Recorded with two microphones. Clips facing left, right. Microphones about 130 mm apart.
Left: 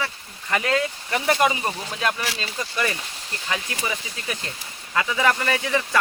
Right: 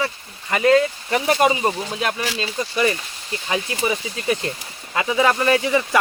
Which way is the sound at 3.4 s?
25° right (ahead or behind).